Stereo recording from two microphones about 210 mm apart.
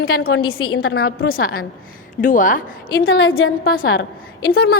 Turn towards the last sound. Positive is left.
turn(degrees=45)  # may be behind; listen again after turning